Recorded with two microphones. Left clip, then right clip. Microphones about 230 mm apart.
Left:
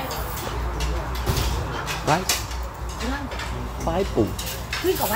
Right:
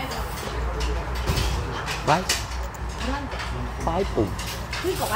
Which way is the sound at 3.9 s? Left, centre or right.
Centre.